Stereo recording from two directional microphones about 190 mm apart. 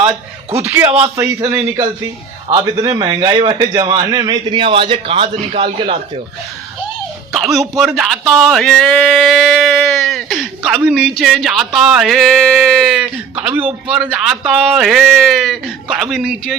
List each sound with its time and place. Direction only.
0.0 s a man's voice: 15° right (ahead or behind)
0.9 s a man's voice: 30° right (ahead or behind)
1.1 s a man's voice: 15° right (ahead or behind); by 6.0 s 30° right (ahead or behind)
7.3 s a man's voice: centre (ahead or behind)